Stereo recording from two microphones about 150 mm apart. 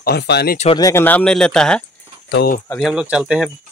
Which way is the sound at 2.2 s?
80° left.